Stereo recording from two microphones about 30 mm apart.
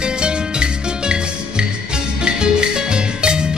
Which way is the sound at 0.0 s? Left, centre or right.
Right.